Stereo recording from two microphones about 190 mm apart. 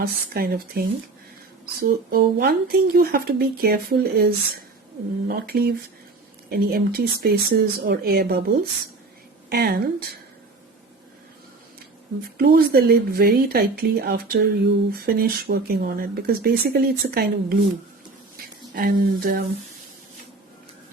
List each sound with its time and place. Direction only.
0.0 s speech: 50° right (ahead or behind)
12.4 s speech: 55° right (ahead or behind)
18.7 s speech: 45° right (ahead or behind)